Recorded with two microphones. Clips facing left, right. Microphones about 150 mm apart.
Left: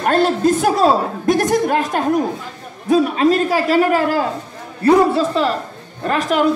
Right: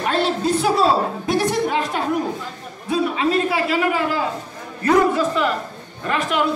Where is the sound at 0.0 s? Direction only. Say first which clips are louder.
Left 5 dB; 45° left (ahead or behind).